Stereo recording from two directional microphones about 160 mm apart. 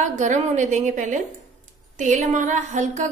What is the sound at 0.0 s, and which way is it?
A woman's voice, 50° right (ahead or behind).